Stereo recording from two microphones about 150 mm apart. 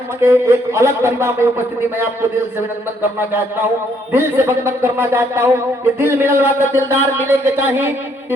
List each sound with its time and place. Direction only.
0.2 s a man's voice: 15° right (ahead or behind)